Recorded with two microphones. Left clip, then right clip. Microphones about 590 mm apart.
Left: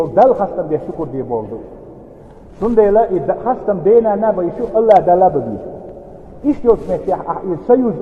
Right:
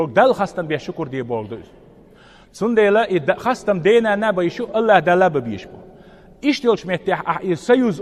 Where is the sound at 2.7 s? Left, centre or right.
Right.